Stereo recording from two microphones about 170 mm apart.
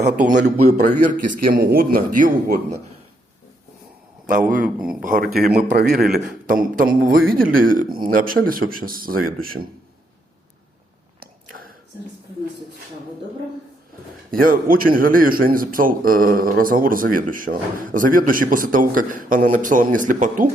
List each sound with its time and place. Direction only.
0.3 s a man's voice: 45° right (ahead or behind)
4.3 s speech: 50° right (ahead or behind); by 6.1 s 70° right (ahead or behind)
6.2 s speech: 55° right (ahead or behind)
14.3 s speech: 55° right (ahead or behind)